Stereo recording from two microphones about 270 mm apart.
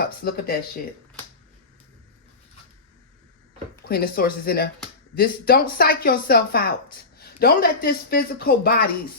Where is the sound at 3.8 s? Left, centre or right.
Left.